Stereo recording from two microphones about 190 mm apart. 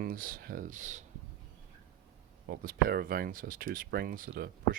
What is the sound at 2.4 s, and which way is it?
Speech, 50° right (ahead or behind).